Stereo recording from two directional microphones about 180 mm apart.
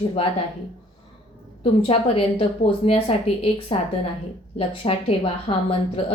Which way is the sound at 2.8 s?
35° left (ahead or behind).